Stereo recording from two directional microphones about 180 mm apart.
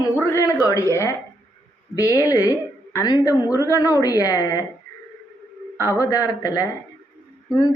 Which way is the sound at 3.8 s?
20° left (ahead or behind).